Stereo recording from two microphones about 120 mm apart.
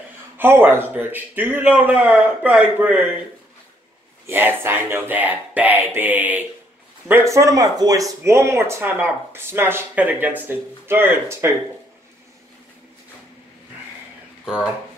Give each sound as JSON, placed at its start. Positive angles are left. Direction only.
{"t": 0.4, "sound": "speech", "side_deg": -20}
{"t": 4.3, "sound": "speech", "side_deg": -20}